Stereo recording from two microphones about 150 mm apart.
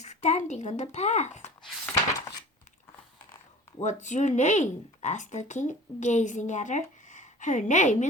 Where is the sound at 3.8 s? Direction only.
55° left (ahead or behind).